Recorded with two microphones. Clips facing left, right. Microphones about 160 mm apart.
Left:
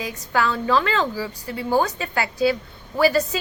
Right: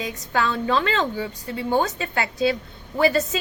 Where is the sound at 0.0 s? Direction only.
20° right (ahead or behind).